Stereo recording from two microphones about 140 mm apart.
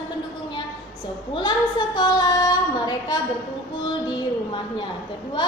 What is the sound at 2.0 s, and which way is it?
Child singing, 30° left (ahead or behind).